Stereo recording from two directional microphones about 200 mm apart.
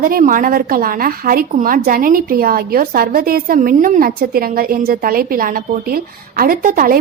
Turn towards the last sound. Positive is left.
turn(degrees=-45)  # may be behind; listen again after turning